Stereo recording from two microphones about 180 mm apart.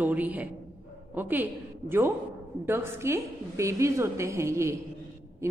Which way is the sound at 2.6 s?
15° right (ahead or behind).